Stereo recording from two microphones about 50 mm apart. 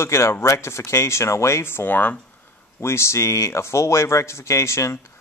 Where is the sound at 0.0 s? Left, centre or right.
Left.